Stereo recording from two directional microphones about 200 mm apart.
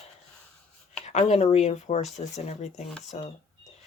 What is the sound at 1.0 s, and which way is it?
Speech, 35° left (ahead or behind).